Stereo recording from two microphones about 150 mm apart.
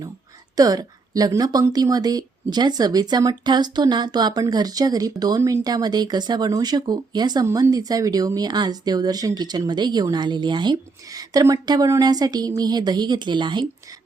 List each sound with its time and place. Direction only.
0.5 s speech: 25° right (ahead or behind)